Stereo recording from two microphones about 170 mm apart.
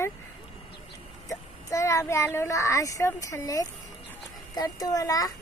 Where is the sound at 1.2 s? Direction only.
20° left (ahead or behind).